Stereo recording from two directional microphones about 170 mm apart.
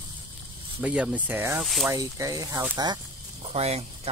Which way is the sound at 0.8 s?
10° right (ahead or behind).